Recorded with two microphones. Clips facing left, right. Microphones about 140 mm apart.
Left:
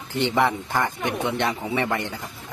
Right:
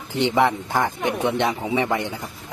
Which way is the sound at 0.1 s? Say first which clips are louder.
Right 2 dB; 15° right (ahead or behind).